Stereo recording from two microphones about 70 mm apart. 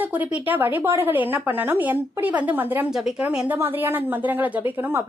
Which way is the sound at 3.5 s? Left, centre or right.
Right.